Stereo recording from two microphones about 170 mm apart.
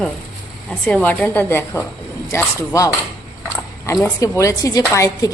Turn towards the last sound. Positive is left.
turn(degrees=20)  # may be behind; listen again after turning